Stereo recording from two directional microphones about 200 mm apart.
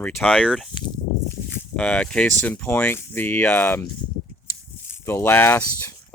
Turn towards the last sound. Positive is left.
turn(degrees=10)  # may be behind; listen again after turning